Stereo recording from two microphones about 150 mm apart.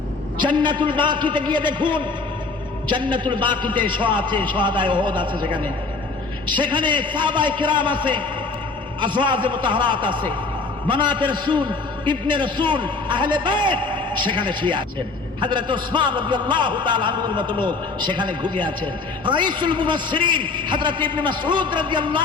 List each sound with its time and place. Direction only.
0.3 s a man's voice: 30° right (ahead or behind)